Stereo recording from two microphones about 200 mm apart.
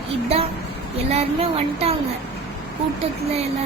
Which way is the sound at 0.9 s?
30° right (ahead or behind).